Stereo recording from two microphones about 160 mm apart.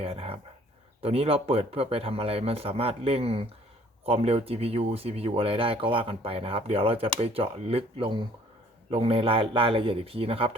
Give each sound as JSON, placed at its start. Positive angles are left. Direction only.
{"t": 0.0, "sound": "dog", "side_deg": -35}
{"t": 1.0, "sound": "speech", "side_deg": -40}